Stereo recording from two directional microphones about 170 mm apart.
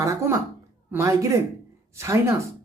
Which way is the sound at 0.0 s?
20° right (ahead or behind).